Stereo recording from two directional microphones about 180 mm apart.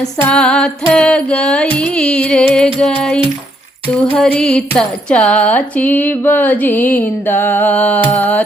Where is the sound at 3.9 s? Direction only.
5° left (ahead or behind).